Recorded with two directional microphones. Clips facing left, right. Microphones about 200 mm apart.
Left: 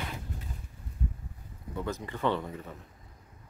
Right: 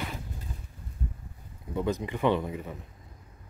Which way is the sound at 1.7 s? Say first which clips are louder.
Right 6 dB; 15° right (ahead or behind).